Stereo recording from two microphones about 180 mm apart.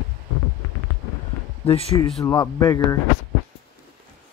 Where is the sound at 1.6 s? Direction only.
30° left (ahead or behind).